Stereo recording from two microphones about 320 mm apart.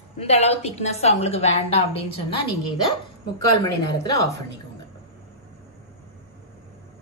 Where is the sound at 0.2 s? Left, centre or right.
Centre.